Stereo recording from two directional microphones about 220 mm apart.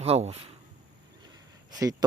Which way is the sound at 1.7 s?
15° right (ahead or behind).